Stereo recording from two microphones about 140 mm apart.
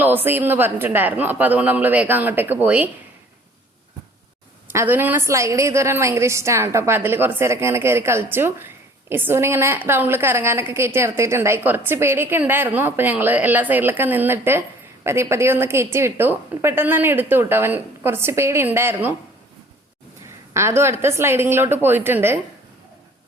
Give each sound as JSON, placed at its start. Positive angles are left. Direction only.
{"t": 0.0, "sound": "a woman's voice", "side_deg": -15}
{"t": 4.7, "sound": "a woman's voice", "side_deg": -15}
{"t": 20.5, "sound": "a woman's voice", "side_deg": -20}